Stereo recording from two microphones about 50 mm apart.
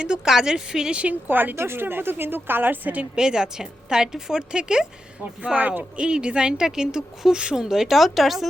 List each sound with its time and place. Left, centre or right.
0.0 s a woman's voice: centre
1.3 s a woman's voice: right
3.2 s a woman's voice: centre
5.5 s speech: right
6.0 s a woman's voice: right; by 8.4 s centre